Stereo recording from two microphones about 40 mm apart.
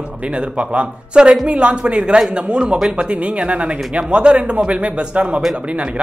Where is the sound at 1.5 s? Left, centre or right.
Right.